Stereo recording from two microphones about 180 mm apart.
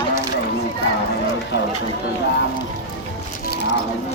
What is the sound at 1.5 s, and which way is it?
Run, 75° left (ahead or behind).